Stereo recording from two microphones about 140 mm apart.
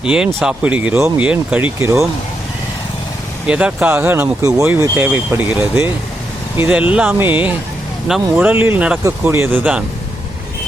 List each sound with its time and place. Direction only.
0.0 s speech: 5° right (ahead or behind)
3.4 s speech: 10° right (ahead or behind)